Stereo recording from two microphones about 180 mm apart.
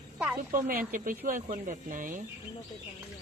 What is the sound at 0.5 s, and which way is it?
Speech, 50° right (ahead or behind).